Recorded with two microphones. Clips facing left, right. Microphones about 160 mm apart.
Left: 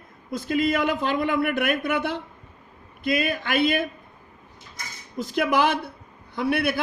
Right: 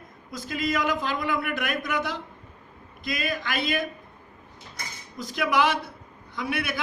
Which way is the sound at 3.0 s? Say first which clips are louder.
Left 5 dB; 40° right (ahead or behind).